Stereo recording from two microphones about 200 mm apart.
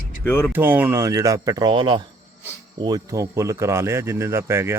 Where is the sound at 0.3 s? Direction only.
10° left (ahead or behind).